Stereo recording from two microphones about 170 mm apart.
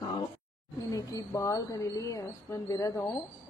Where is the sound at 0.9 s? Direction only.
20° left (ahead or behind).